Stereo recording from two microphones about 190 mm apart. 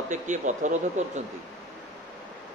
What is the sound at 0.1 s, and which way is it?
Speech, 40° right (ahead or behind).